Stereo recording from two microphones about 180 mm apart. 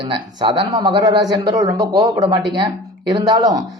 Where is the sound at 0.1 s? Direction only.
25° right (ahead or behind).